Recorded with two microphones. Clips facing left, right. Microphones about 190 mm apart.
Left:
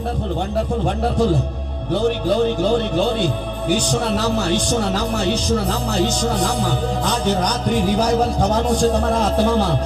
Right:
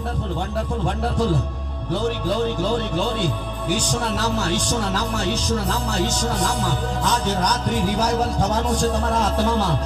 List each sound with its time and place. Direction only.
2.0 s speech: 20° left (ahead or behind)
4.1 s speech: 20° left (ahead or behind)